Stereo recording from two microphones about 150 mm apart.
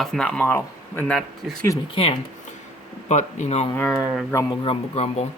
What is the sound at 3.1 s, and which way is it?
Speech, 50° left (ahead or behind).